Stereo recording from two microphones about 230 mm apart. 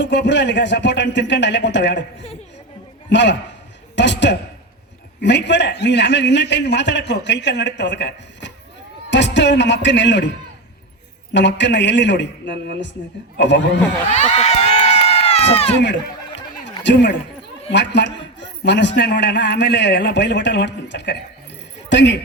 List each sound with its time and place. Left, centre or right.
0.0 s a man's voice: left
3.1 s a man's voice: left
11.3 s a man's voice: left
14.2 s run: left
16.8 s a man's voice: left